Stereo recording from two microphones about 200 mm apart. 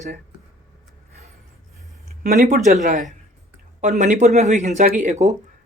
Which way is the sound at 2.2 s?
45° right (ahead or behind).